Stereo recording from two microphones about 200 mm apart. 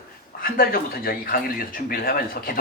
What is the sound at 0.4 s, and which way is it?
Speech, 45° left (ahead or behind).